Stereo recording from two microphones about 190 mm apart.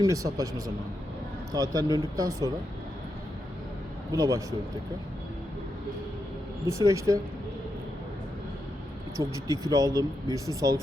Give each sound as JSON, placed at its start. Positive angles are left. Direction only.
{"t": 0.0, "sound": "speech", "side_deg": -15}
{"t": 1.5, "sound": "speech", "side_deg": -20}
{"t": 4.1, "sound": "speech", "side_deg": -15}
{"t": 6.7, "sound": "speech", "side_deg": -15}
{"t": 9.1, "sound": "speech", "side_deg": -15}